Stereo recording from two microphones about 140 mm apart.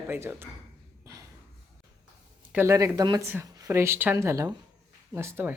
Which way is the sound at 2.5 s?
20° right (ahead or behind).